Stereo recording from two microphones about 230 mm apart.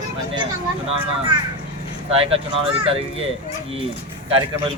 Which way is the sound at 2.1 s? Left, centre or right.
Right.